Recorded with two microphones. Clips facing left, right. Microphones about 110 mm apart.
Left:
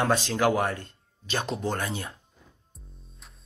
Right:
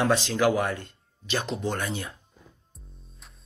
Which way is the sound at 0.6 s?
35° left (ahead or behind).